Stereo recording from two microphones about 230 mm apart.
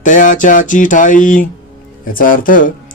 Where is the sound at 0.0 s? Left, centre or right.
Left.